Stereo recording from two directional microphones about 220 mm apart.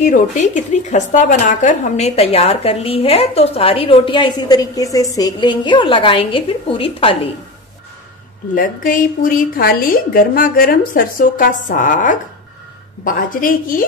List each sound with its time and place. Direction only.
0.0 s speech: 35° left (ahead or behind)
8.5 s a woman's voice: 40° left (ahead or behind)